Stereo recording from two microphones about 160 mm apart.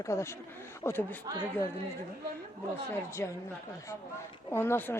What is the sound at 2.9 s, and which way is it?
Speech, 15° left (ahead or behind).